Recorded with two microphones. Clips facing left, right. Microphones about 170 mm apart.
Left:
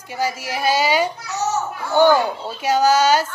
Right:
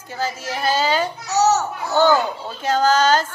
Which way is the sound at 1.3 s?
75° right (ahead or behind).